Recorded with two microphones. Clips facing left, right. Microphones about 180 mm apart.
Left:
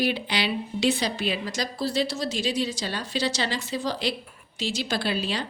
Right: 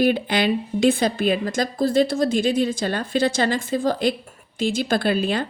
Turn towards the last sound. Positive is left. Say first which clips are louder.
# right 7 dB
turn(degrees=-55)  # may be behind; listen again after turning